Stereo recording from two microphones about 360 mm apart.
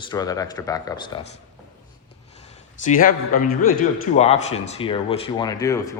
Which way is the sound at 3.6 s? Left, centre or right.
Left.